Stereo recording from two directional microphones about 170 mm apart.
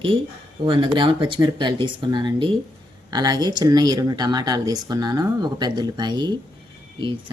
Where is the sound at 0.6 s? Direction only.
30° right (ahead or behind).